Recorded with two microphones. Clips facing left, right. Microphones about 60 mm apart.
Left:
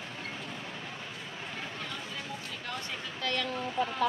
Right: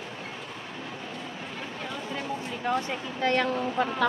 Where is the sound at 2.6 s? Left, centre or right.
Right.